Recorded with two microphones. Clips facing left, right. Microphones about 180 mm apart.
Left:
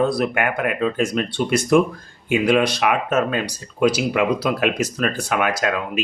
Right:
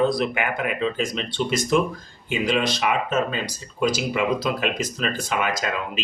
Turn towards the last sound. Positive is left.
turn(degrees=60)  # may be behind; listen again after turning